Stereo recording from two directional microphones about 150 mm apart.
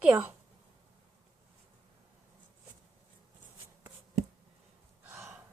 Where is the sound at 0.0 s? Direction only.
10° right (ahead or behind).